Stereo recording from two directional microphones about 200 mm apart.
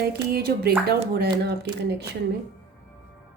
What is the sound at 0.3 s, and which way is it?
Speech, 55° right (ahead or behind).